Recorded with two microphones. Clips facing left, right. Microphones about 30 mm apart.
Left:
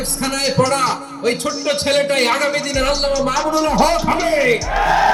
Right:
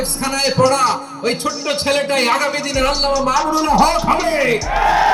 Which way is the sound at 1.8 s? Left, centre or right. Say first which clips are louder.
Even; right.